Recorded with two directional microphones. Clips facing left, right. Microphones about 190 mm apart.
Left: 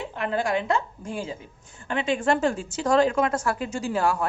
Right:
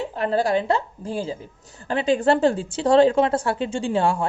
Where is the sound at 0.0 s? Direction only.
35° right (ahead or behind).